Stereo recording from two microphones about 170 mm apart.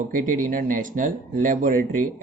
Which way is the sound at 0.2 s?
55° right (ahead or behind).